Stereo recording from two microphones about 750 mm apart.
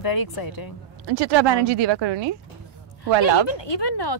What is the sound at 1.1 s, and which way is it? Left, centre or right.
A woman's voice, right.